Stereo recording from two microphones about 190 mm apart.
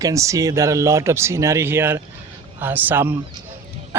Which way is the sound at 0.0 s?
15° right (ahead or behind).